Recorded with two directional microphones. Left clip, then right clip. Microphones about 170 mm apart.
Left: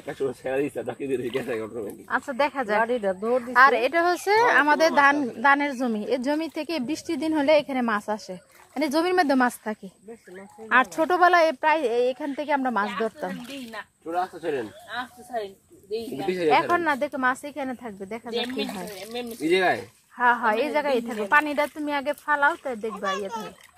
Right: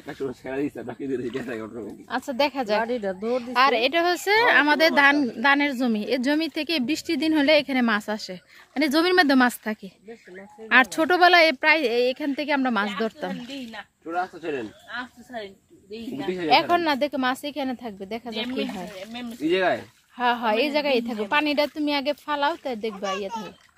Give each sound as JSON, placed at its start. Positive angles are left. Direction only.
{"t": 0.5, "sound": "speech", "side_deg": -20}
{"t": 2.8, "sound": "speech", "side_deg": -50}
{"t": 3.5, "sound": "speech", "side_deg": -20}
{"t": 13.3, "sound": "speech", "side_deg": 0}
{"t": 14.0, "sound": "speech", "side_deg": 25}
{"t": 14.9, "sound": "speech", "side_deg": -10}
{"t": 16.4, "sound": "speech", "side_deg": -20}
{"t": 19.4, "sound": "speech", "side_deg": -5}
{"t": 20.2, "sound": "speech", "side_deg": -20}